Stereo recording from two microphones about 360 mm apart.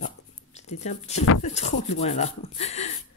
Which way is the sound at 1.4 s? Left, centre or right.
Centre.